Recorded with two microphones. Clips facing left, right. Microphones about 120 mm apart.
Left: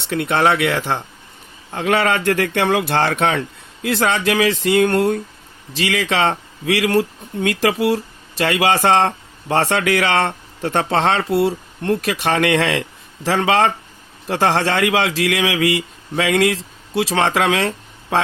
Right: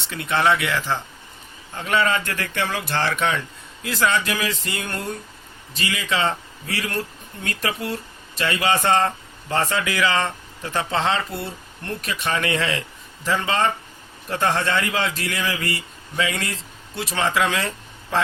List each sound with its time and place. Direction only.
0.1 s speech: 60° left (ahead or behind)
1.7 s speech: 70° left (ahead or behind)
13.2 s speech: 90° left; by 18.2 s 70° left (ahead or behind)